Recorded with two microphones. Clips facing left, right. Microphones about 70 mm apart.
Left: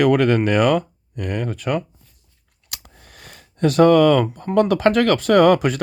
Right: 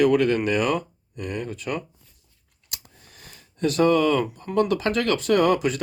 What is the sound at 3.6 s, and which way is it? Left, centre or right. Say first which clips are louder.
Speech: left 6 dB; left.